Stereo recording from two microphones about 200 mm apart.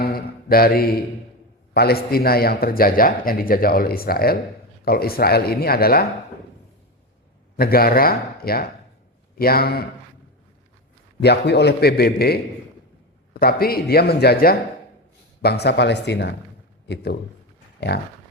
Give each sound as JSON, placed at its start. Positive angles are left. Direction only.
{"t": 0.0, "sound": "mantra", "side_deg": 50}
{"t": 1.7, "sound": "a man's voice", "side_deg": 50}
{"t": 7.5, "sound": "a man's voice", "side_deg": 50}
{"t": 11.2, "sound": "a man's voice", "side_deg": 55}